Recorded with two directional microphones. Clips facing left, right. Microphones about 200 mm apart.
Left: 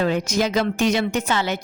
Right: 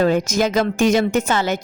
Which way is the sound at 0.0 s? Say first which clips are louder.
Right 4 dB; 45° right (ahead or behind).